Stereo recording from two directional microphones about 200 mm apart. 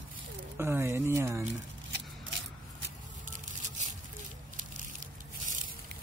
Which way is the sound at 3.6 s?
35° right (ahead or behind).